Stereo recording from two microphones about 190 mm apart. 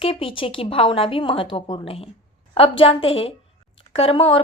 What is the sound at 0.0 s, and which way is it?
A woman's voice, 30° left (ahead or behind).